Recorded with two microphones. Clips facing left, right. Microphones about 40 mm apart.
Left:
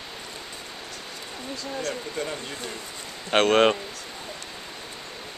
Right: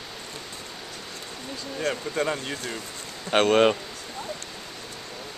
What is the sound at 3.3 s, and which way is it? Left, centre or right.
Speech, centre.